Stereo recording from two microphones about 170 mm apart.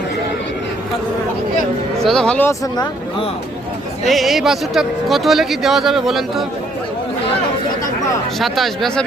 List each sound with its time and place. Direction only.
2.0 s speech: 5° left (ahead or behind)
4.0 s speech: centre (ahead or behind)
8.4 s speech: centre (ahead or behind)